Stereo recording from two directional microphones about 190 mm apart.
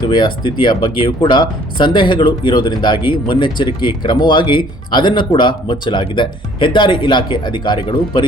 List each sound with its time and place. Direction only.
0.1 s speech: 25° left (ahead or behind)